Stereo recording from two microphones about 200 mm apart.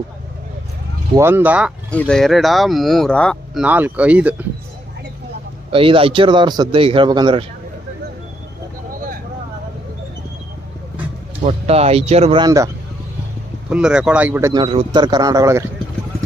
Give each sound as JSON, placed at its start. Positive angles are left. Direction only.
{"t": 1.1, "sound": "speech", "side_deg": -10}
{"t": 1.9, "sound": "speech", "side_deg": 5}
{"t": 5.7, "sound": "a man's voice", "side_deg": -25}
{"t": 11.4, "sound": "speech", "side_deg": -30}
{"t": 13.7, "sound": "speech", "side_deg": -5}
{"t": 14.5, "sound": "a man's voice", "side_deg": -25}